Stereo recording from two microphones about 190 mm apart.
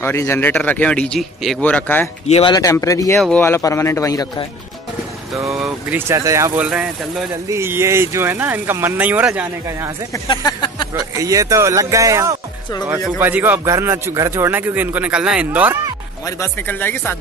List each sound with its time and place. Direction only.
0.0 s speech: 15° left (ahead or behind)
2.2 s speech: 35° left (ahead or behind)
2.5 s speech: 15° left (ahead or behind)
3.2 s speech: 5° left (ahead or behind)
5.5 s a man's voice: 5° right (ahead or behind)
10.1 s a sound: 20° left (ahead or behind)
11.1 s a man's voice: 15° right (ahead or behind)
16.3 s speech: 15° left (ahead or behind)